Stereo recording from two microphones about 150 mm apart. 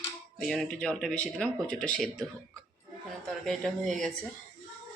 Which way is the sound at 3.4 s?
5° left (ahead or behind).